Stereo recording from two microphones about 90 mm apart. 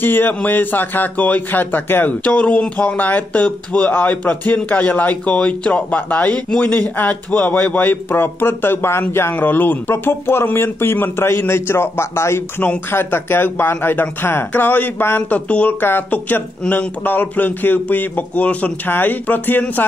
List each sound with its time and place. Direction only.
0.0 s a man's voice: 20° left (ahead or behind)